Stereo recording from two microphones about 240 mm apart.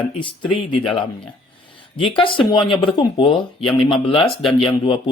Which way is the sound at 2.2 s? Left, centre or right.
Centre.